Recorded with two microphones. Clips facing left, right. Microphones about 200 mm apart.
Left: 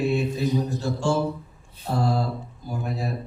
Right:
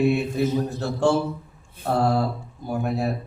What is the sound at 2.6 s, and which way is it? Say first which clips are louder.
Speech: right 6 dB; 60° right (ahead or behind).